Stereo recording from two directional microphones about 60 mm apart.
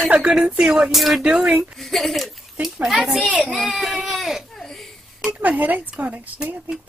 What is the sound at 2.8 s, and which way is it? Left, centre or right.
Speech, centre.